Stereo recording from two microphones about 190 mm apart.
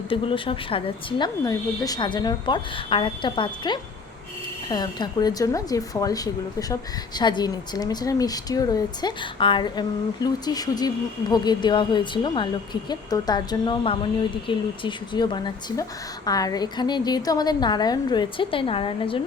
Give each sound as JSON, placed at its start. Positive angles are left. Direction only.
{"t": 0.1, "sound": "a woman's voice", "side_deg": 25}